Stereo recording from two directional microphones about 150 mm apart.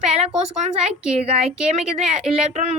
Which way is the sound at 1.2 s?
40° right (ahead or behind).